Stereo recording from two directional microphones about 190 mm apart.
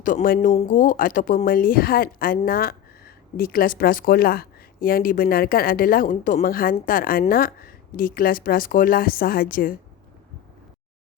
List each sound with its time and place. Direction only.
0.0 s speech: 45° left (ahead or behind)